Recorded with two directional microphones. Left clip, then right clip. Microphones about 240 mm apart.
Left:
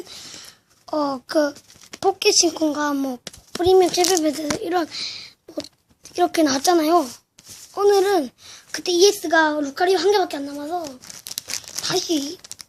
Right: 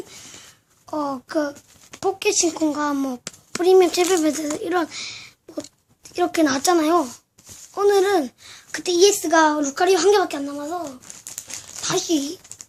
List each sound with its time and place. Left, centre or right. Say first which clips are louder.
0.9 s a child's voice: left 3 dB; left
10.8 s crumpling: left 1 dB; left
11.8 s a child's voice: right 1 dB; centre